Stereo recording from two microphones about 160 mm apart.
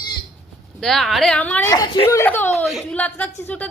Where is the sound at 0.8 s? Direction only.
Centre (ahead or behind).